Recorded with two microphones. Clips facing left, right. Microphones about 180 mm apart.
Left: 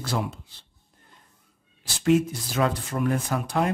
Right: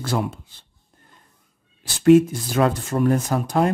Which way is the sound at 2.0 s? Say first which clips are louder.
Right 8 dB; 50° right (ahead or behind).